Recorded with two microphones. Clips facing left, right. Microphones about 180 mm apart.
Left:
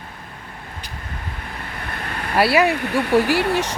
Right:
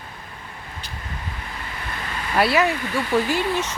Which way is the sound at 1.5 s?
55° left (ahead or behind).